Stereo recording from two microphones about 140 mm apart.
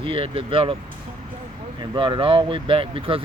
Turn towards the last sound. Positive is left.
turn(degrees=-40)  # may be behind; listen again after turning